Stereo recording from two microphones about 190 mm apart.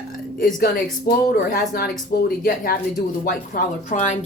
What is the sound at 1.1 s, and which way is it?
Speech, 50° left (ahead or behind).